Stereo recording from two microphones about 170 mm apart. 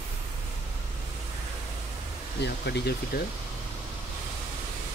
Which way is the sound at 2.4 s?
75° left (ahead or behind).